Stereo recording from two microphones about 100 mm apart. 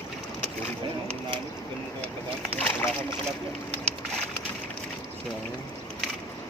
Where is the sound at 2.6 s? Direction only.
20° left (ahead or behind).